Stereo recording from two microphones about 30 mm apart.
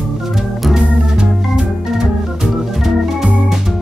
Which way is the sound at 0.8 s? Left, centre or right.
Right.